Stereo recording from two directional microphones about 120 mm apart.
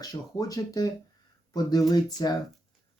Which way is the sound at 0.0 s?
30° left (ahead or behind).